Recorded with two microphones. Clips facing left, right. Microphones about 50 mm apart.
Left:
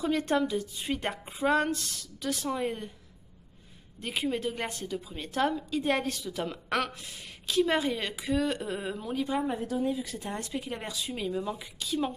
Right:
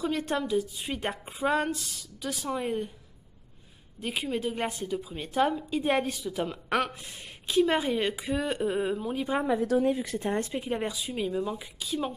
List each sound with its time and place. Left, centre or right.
0.0 s a woman's voice: centre
4.0 s a woman's voice: centre
9.8 s speech: right
10.6 s a woman's voice: centre